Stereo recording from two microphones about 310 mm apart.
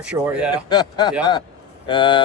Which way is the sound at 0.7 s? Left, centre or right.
Centre.